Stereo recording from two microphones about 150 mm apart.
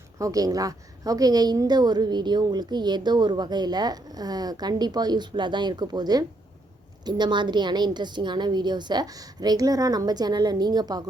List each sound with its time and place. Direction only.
0.2 s a woman's voice: 25° right (ahead or behind)